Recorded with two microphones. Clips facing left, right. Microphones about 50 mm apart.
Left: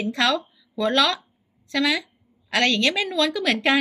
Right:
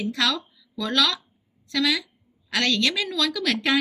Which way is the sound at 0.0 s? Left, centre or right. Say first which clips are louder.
Left 3 dB; left.